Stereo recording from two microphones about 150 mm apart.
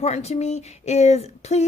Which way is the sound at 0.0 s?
45° left (ahead or behind).